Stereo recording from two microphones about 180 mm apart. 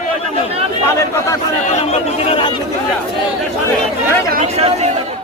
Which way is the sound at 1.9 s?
30° left (ahead or behind).